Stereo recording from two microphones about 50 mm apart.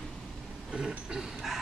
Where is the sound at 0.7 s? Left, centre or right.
Centre.